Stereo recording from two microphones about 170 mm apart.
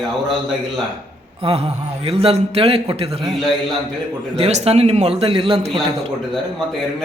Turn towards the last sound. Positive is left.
turn(degrees=-35)  # may be behind; listen again after turning